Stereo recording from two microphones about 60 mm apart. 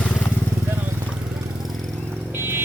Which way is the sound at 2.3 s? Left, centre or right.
Right.